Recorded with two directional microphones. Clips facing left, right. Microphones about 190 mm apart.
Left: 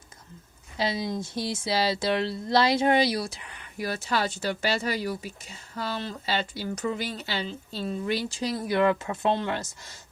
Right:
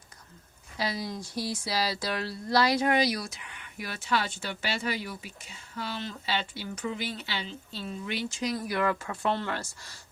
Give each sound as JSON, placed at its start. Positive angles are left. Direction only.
{"t": 0.8, "sound": "speech", "side_deg": 25}